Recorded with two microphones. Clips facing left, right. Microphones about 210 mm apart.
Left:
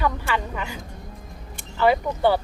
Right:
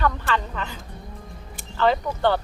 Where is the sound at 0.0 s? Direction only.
10° left (ahead or behind).